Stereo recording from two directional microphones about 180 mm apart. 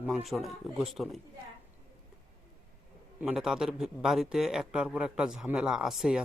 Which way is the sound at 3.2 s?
5° right (ahead or behind).